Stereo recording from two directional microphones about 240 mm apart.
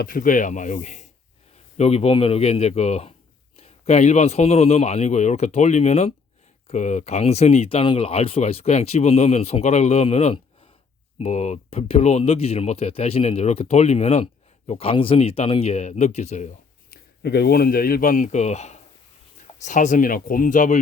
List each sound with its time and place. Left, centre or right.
0.0 s speech: left
16.9 s speech: left